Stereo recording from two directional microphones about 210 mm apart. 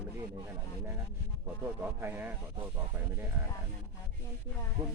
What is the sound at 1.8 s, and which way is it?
Speech, 10° right (ahead or behind).